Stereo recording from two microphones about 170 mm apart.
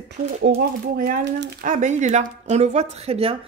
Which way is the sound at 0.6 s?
55° right (ahead or behind).